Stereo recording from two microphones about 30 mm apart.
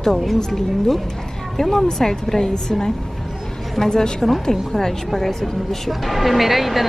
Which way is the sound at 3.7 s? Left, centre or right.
Centre.